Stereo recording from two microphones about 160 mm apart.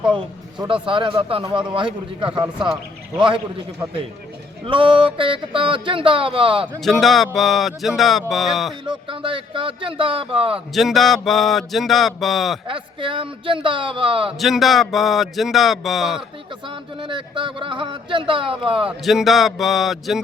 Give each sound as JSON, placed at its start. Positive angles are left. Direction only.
{"t": 0.2, "sound": "a man's voice", "side_deg": -30}
{"t": 4.6, "sound": "a man's voice", "side_deg": -30}
{"t": 6.7, "sound": "speech", "side_deg": 0}
{"t": 8.8, "sound": "a man's voice", "side_deg": -30}
{"t": 10.8, "sound": "speech", "side_deg": 0}
{"t": 12.6, "sound": "a man's voice", "side_deg": -30}
{"t": 14.3, "sound": "speech", "side_deg": 0}
{"t": 16.6, "sound": "a man's voice", "side_deg": -30}
{"t": 19.0, "sound": "speech", "side_deg": 0}